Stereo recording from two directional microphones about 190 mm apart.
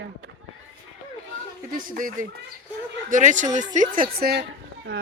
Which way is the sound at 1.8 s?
45° right (ahead or behind).